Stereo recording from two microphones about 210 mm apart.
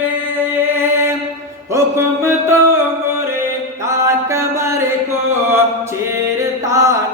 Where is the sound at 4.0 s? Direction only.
15° right (ahead or behind).